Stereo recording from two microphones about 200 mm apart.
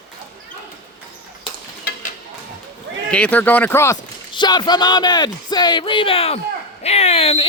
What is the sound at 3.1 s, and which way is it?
A man's voice, 5° left (ahead or behind).